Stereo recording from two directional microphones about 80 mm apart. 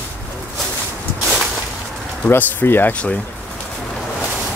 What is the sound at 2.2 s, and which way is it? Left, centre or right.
Speech, left.